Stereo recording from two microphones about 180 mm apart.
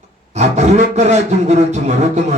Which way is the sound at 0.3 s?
40° right (ahead or behind).